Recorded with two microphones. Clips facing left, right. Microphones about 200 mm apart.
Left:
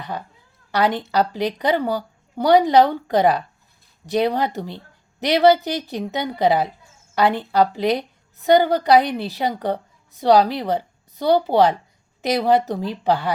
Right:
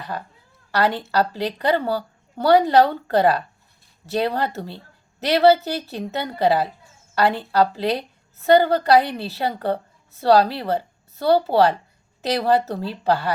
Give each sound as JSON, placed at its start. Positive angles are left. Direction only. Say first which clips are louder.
{"t": 0.7, "sound": "a woman's voice", "louder": "left 1 dB", "side_deg": 15}